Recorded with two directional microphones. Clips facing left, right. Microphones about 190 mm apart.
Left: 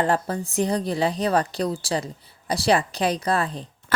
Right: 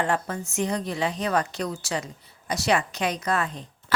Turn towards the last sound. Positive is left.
turn(degrees=35)  # may be behind; listen again after turning